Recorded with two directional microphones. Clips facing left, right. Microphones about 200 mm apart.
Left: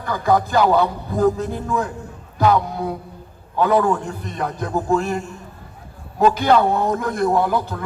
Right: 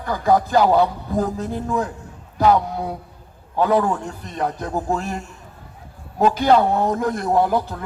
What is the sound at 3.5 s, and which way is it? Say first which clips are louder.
A man's voice: left 1 dB; 40° right (ahead or behind).